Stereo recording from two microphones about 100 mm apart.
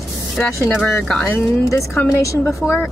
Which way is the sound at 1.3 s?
30° left (ahead or behind).